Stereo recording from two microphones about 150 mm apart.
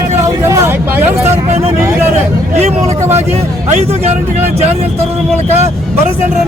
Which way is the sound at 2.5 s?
45° right (ahead or behind).